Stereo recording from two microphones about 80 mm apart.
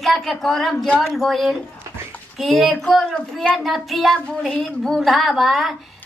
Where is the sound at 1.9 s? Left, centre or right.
Right.